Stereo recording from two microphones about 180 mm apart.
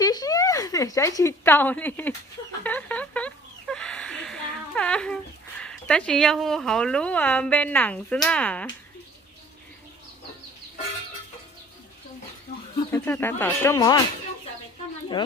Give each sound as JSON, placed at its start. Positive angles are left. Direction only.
{"t": 0.0, "sound": "a sound", "side_deg": 20}
{"t": 2.6, "sound": "speech", "side_deg": 10}
{"t": 12.9, "sound": "speech", "side_deg": 10}